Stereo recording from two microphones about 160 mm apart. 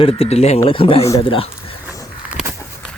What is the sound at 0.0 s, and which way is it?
Speech, 35° left (ahead or behind).